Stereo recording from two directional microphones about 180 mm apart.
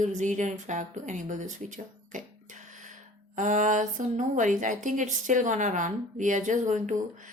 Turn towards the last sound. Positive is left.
turn(degrees=-45)  # may be behind; listen again after turning